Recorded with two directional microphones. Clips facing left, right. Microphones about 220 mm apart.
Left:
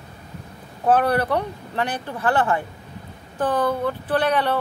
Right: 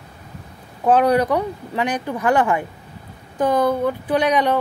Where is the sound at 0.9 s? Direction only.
15° right (ahead or behind).